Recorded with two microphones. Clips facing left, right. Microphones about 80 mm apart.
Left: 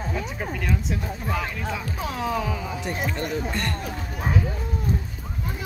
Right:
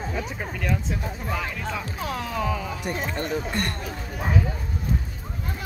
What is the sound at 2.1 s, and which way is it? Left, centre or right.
Speech, centre.